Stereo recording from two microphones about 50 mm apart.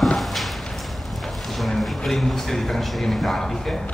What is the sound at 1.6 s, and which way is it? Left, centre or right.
Speech, centre.